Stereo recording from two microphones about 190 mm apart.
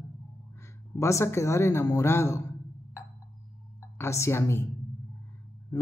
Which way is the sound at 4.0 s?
15° left (ahead or behind).